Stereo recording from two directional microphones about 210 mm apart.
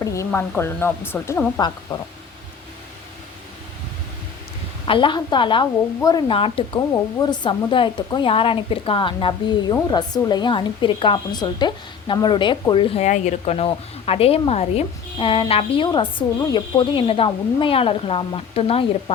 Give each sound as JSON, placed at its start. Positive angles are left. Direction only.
{"t": 0.0, "sound": "a sound", "side_deg": 15}
{"t": 0.3, "sound": "speech", "side_deg": 10}
{"t": 4.9, "sound": "a woman's voice", "side_deg": 25}